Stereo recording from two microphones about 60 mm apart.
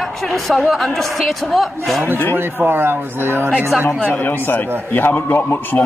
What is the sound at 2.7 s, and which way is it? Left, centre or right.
Speech, right.